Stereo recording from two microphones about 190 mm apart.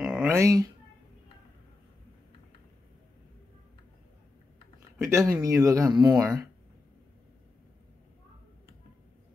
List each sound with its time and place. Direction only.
0.0 s speech: 5° right (ahead or behind)
4.9 s speech: 15° right (ahead or behind)